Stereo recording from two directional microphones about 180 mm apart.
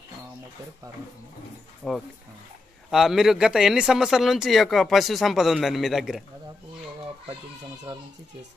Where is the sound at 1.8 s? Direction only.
Centre (ahead or behind).